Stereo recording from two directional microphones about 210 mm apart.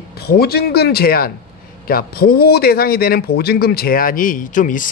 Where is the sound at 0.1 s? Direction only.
50° left (ahead or behind).